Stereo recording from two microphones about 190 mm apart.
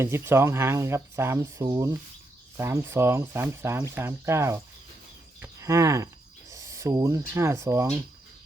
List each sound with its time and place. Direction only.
0.0 s speech: 15° right (ahead or behind)
5.6 s speech: 15° right (ahead or behind)